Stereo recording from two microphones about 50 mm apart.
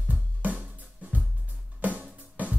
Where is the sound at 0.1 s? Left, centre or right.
Right.